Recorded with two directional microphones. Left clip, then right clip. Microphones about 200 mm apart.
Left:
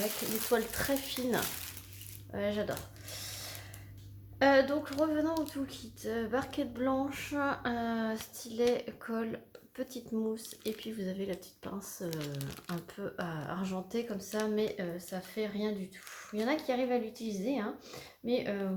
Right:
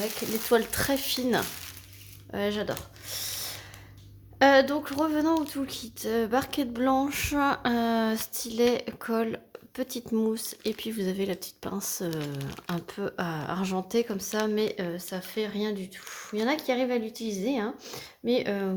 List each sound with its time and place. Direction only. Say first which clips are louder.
0.5 s speech: right 7 dB; 50° right (ahead or behind)
3.1 s a sound: right 9 dB; 50° right (ahead or behind)
4.4 s speech: right 6 dB; 50° right (ahead or behind)